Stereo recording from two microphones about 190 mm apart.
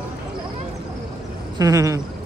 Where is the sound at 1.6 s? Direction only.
15° right (ahead or behind).